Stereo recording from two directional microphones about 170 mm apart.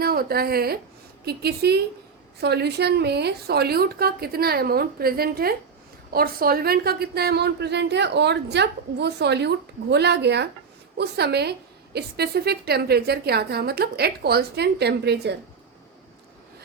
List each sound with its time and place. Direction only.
0.0 s a woman's voice: 65° right (ahead or behind)